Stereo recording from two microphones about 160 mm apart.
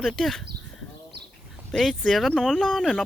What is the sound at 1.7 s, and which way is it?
Speech, centre (ahead or behind).